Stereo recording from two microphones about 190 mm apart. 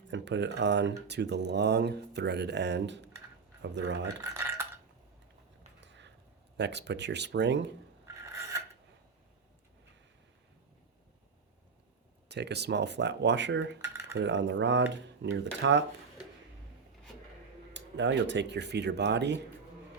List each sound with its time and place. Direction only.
0.1 s speech: 70° right (ahead or behind)
4.0 s speech: 15° right (ahead or behind)
5.8 s a sound: 70° right (ahead or behind)
6.6 s speech: 65° right (ahead or behind)
8.0 s filing: 15° right (ahead or behind)
12.3 s speech: 60° right (ahead or behind)
13.8 s cutlery: 15° right (ahead or behind)
14.2 s speech: 70° right (ahead or behind)
17.7 s speech: 70° right (ahead or behind)